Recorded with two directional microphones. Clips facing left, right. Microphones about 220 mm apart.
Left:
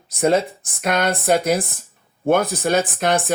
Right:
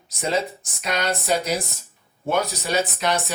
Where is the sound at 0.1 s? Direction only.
55° left (ahead or behind).